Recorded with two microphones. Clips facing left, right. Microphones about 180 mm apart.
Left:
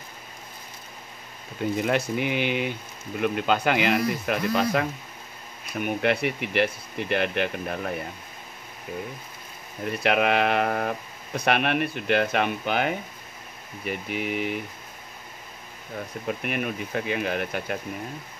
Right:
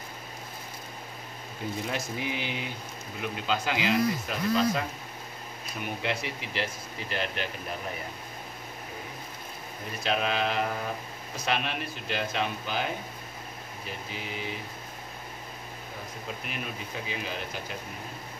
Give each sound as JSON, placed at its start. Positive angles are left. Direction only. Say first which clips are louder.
{"t": 1.8, "sound": "speech", "louder": "left 9 dB", "side_deg": 65}
{"t": 10.0, "sound": "speech", "louder": "left 6 dB", "side_deg": 65}
{"t": 16.3, "sound": "speech", "louder": "left 10 dB", "side_deg": 60}